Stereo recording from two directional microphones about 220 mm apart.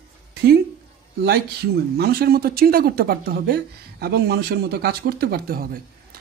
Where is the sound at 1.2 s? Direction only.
45° right (ahead or behind).